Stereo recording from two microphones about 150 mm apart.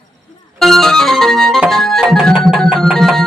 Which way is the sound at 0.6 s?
Centre (ahead or behind).